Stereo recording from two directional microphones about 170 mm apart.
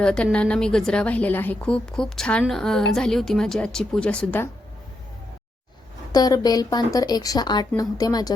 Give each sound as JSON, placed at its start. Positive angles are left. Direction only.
{"t": 0.0, "sound": "a woman's voice", "side_deg": 5}
{"t": 6.1, "sound": "a woman's voice", "side_deg": 25}